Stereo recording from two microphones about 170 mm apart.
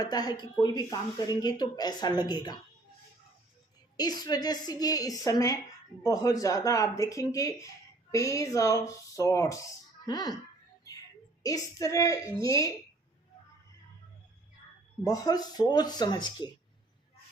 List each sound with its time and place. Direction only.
0.0 s speech: 25° left (ahead or behind)
3.9 s speech: 25° left (ahead or behind)
11.4 s speech: 20° left (ahead or behind)
15.0 s speech: 20° left (ahead or behind)